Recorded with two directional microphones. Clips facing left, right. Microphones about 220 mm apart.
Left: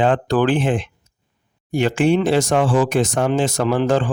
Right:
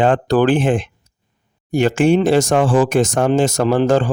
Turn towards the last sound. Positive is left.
turn(degrees=-40)  # may be behind; listen again after turning